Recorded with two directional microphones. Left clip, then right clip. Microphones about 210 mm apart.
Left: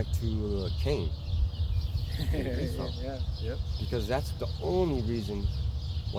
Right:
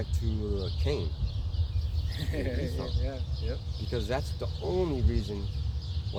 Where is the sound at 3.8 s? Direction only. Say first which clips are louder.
Left 1 dB; 30° left (ahead or behind).